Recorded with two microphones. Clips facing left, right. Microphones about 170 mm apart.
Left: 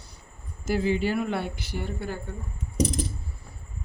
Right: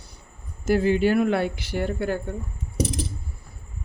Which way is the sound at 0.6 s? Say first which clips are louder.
Right 5 dB; 60° right (ahead or behind).